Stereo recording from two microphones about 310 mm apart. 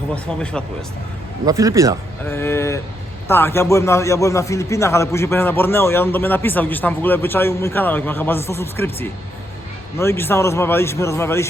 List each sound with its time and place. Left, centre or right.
1.5 s a man's voice: centre
2.3 s a man's voice: centre